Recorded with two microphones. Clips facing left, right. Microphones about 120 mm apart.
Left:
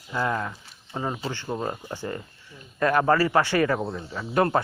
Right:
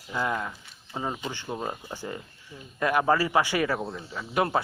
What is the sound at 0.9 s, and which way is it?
Speech, 10° right (ahead or behind).